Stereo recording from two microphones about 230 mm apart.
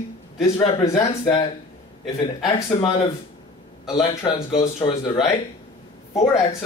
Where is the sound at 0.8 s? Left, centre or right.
Left.